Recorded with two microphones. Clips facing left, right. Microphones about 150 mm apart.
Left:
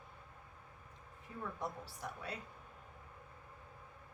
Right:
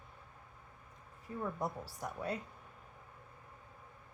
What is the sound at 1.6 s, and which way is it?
Speech, 45° right (ahead or behind).